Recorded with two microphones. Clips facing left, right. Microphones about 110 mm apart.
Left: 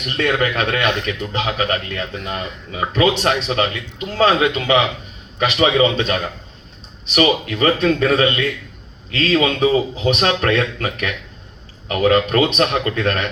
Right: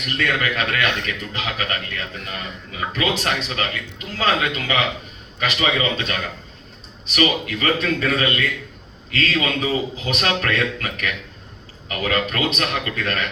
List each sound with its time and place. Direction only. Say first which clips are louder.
0.0 s speech: left 4 dB; 30° left (ahead or behind)